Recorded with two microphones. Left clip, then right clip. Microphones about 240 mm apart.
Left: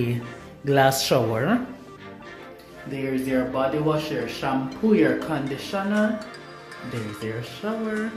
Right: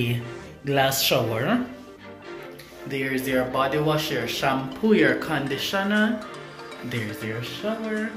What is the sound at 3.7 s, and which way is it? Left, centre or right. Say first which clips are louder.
Speech: right 1 dB; centre.